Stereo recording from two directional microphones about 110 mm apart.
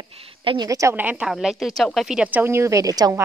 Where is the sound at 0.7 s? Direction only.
30° right (ahead or behind).